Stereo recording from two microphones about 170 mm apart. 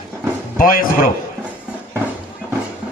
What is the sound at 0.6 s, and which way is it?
Speech, 55° left (ahead or behind).